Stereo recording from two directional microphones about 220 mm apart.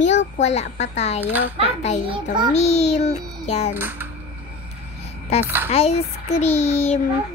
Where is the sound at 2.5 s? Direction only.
30° left (ahead or behind).